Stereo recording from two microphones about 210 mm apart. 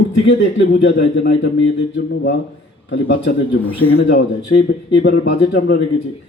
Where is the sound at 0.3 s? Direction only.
55° left (ahead or behind).